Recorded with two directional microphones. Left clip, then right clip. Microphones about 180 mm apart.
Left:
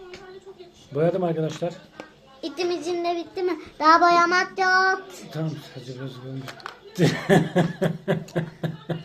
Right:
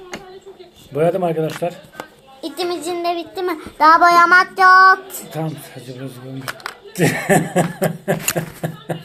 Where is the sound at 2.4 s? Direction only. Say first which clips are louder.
Right 4 dB; 10° left (ahead or behind).